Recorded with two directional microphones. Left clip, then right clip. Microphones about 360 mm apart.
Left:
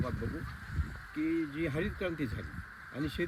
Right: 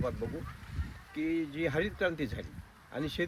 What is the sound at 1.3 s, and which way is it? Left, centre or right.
Speech, centre.